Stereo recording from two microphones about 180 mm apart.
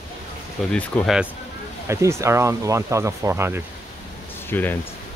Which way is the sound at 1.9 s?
15° right (ahead or behind).